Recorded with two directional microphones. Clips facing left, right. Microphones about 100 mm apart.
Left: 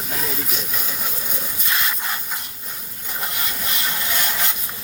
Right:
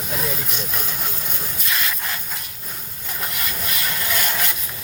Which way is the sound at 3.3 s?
25° left (ahead or behind).